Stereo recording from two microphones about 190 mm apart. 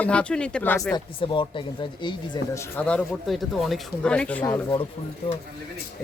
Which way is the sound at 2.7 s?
5° left (ahead or behind).